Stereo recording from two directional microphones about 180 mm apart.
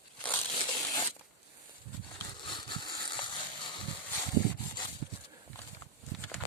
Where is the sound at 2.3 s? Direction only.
25° left (ahead or behind).